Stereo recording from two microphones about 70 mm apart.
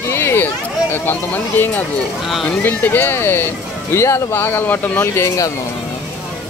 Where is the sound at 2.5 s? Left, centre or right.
Left.